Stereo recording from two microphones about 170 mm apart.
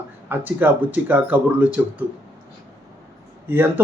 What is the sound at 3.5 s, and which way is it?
Speech, 10° right (ahead or behind).